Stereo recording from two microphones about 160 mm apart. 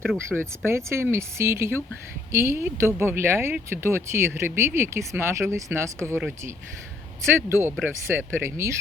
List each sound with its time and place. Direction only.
0.3 s speech: 15° right (ahead or behind)